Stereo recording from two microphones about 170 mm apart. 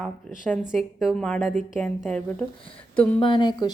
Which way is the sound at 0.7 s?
Centre (ahead or behind).